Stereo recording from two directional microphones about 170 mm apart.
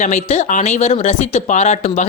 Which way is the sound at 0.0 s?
40° left (ahead or behind).